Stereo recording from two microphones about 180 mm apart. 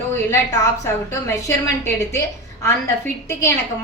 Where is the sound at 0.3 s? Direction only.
15° left (ahead or behind).